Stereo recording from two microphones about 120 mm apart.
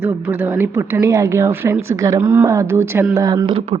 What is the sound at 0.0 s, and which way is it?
Speech, 15° right (ahead or behind).